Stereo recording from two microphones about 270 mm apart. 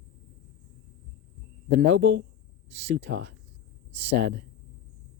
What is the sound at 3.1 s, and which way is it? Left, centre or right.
Speech, right.